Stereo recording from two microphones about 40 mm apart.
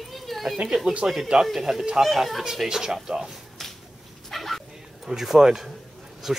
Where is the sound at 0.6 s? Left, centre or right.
Centre.